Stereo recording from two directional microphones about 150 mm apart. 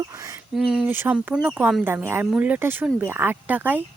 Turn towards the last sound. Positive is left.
turn(degrees=-10)  # may be behind; listen again after turning